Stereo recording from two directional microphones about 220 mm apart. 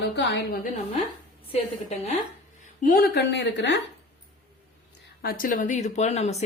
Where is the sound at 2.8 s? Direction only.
40° left (ahead or behind).